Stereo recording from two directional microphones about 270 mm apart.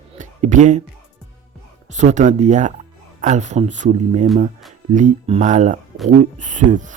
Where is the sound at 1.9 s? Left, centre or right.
Right.